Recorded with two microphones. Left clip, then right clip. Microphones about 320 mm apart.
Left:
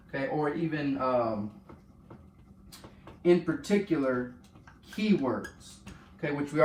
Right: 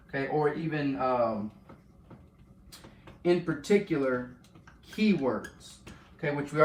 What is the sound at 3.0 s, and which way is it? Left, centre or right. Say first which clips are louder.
Speech: left 2 dB; centre.